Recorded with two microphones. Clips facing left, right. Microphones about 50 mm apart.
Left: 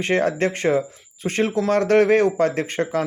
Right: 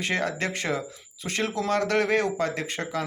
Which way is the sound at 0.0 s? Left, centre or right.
Left.